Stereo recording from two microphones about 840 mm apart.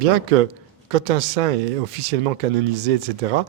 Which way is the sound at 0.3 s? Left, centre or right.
Right.